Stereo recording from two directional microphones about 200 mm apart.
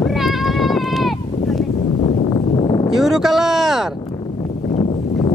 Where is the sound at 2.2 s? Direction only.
25° left (ahead or behind).